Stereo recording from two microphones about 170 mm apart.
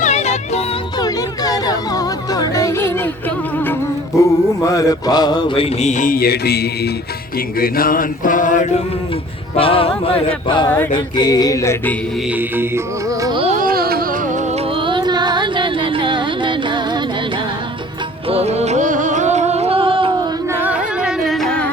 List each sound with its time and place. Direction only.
0.0 s music: 40° left (ahead or behind)
0.9 s music: 20° left (ahead or behind)
4.2 s mantra: 20° left (ahead or behind); by 6.9 s 70° left (ahead or behind)
7.6 s mantra: 60° left (ahead or behind)
9.6 s mantra: 30° left (ahead or behind); by 11.9 s 15° left (ahead or behind)
12.3 s music: 10° right (ahead or behind)
13.6 s music: 60° right (ahead or behind)
14.8 s music: 30° right (ahead or behind)
18.3 s music: 40° right (ahead or behind)
20.5 s carnatic music: 10° right (ahead or behind)